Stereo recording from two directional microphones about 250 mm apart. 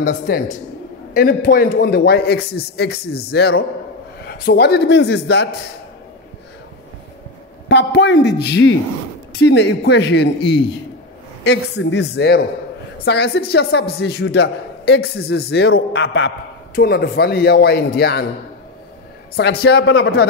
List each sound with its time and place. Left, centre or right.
0.0 s a man's voice: left
7.6 s a man's voice: left
19.3 s speech: left